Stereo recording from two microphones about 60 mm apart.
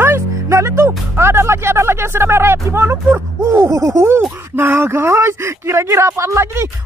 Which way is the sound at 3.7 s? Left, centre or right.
Right.